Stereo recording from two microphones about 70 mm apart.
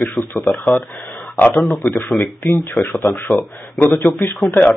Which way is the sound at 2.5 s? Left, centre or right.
Left.